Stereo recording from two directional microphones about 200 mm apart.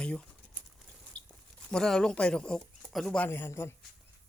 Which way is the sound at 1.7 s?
5° left (ahead or behind).